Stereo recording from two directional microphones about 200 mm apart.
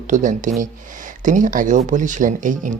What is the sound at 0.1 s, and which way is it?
Speech, 40° right (ahead or behind).